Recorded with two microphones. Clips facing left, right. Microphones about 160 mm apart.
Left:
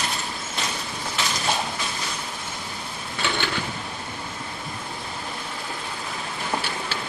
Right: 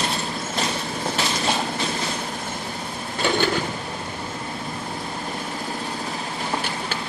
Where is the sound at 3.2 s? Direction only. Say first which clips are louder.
Right 6 dB; 45° right (ahead or behind).